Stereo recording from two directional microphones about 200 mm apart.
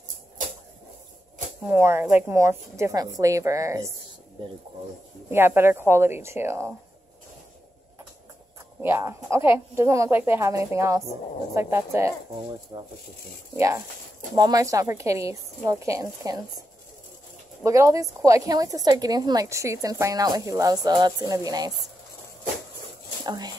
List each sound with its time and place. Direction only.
1.7 s a woman's voice: 10° right (ahead or behind)
5.3 s a woman's voice: 10° right (ahead or behind)
8.8 s a woman's voice: 15° right (ahead or behind)
17.6 s a woman's voice: 15° right (ahead or behind)
23.2 s speech: 20° right (ahead or behind)